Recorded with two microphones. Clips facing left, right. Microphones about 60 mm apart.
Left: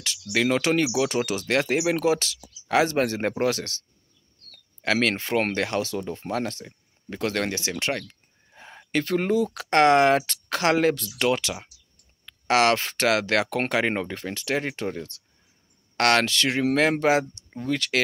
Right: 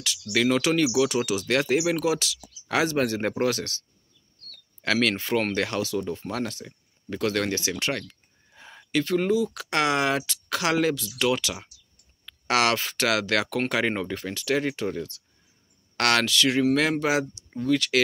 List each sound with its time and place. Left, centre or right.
0.3 s speech: left
1.5 s speech: left
4.5 s cricket: left
5.2 s speech: left
8.5 s a sound: left
8.9 s speech: left
17.5 s a sound: centre
17.7 s speech: left